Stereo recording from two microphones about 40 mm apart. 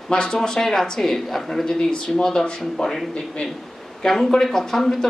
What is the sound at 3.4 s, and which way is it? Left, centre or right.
Speech, left.